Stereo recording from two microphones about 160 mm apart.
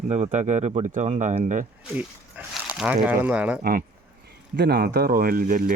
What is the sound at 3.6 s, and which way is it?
Speech, 60° right (ahead or behind).